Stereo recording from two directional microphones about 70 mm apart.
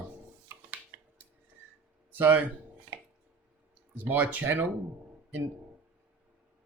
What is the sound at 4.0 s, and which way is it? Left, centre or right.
Speech, right.